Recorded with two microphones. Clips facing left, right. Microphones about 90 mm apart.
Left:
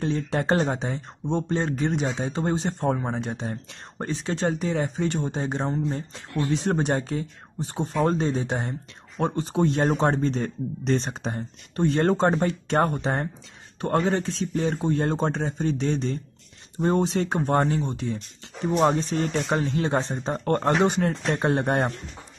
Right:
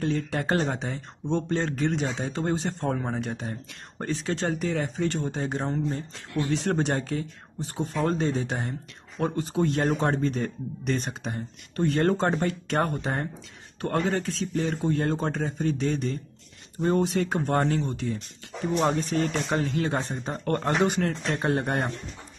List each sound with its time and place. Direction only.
0.0 s speech: 25° left (ahead or behind)